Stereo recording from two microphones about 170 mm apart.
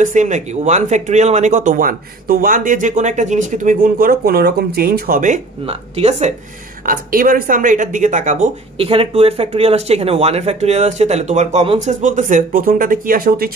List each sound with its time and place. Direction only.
0.0 s speech: 45° right (ahead or behind)
5.7 s speech: 35° right (ahead or behind)
6.9 s speech: 55° right (ahead or behind); by 11.9 s 35° right (ahead or behind)
11.9 s speech: 45° right (ahead or behind)